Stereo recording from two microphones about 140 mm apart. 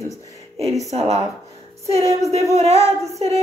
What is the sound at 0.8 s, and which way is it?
Speech, 50° right (ahead or behind).